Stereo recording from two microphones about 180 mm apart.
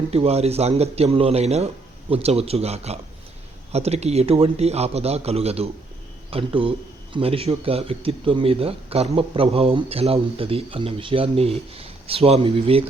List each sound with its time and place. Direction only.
0.1 s speech: 35° right (ahead or behind)